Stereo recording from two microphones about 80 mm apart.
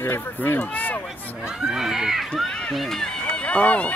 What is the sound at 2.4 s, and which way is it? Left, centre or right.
Run, centre.